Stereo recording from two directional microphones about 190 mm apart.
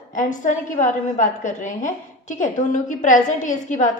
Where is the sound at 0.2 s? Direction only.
40° left (ahead or behind).